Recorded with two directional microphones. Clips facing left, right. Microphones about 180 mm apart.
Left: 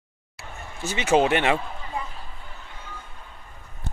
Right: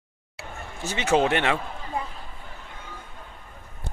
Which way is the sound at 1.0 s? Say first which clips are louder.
Left 2 dB; 15° left (ahead or behind).